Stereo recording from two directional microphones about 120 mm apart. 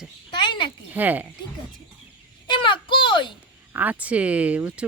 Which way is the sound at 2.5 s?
45° left (ahead or behind).